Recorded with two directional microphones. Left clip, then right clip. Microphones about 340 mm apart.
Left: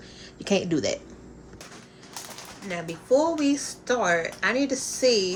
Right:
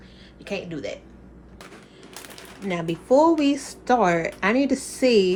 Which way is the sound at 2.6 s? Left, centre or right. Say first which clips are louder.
Right 3 dB; centre.